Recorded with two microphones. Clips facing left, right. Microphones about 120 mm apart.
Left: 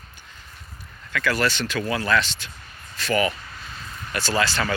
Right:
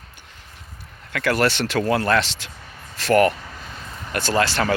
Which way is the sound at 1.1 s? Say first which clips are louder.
Right 3 dB; 60° right (ahead or behind).